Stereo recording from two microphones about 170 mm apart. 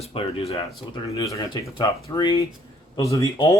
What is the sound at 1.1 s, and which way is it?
Speech, 20° left (ahead or behind).